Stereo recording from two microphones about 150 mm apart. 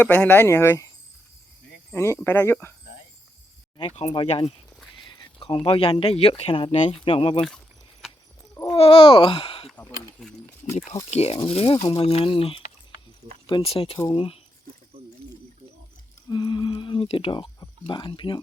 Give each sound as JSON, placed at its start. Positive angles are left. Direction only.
{"t": 0.0, "sound": "speech", "side_deg": 15}
{"t": 1.9, "sound": "speech", "side_deg": 15}
{"t": 3.8, "sound": "speech", "side_deg": 40}
{"t": 4.4, "sound": "a sound", "side_deg": 0}
{"t": 5.0, "sound": "a sound", "side_deg": 35}
{"t": 5.6, "sound": "speech", "side_deg": 35}
{"t": 8.7, "sound": "speech", "side_deg": 40}
{"t": 9.7, "sound": "a sound", "side_deg": 5}
{"t": 11.1, "sound": "speech", "side_deg": 40}
{"t": 16.3, "sound": "speech", "side_deg": 30}